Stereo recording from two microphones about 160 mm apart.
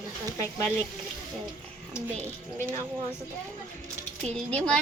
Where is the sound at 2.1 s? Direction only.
50° right (ahead or behind).